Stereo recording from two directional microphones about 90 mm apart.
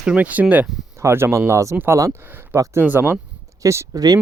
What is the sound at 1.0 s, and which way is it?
Speech, 30° right (ahead or behind).